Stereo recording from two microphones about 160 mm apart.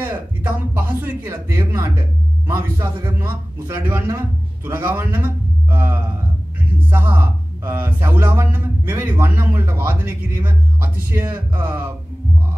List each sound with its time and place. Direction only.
0.0 s a man's voice: 10° right (ahead or behind)